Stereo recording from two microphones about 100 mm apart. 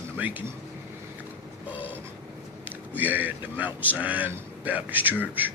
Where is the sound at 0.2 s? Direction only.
15° right (ahead or behind).